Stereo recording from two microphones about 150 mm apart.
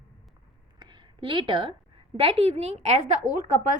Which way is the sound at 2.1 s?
40° right (ahead or behind).